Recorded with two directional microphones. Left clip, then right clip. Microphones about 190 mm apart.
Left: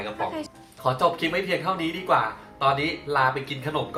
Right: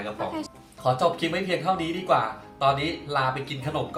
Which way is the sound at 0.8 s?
Centre (ahead or behind).